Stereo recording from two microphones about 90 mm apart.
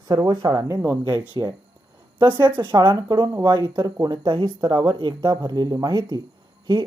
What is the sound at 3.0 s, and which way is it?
Speech, 40° right (ahead or behind).